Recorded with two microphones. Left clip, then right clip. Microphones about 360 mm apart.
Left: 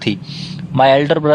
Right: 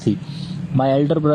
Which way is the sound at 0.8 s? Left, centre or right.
Left.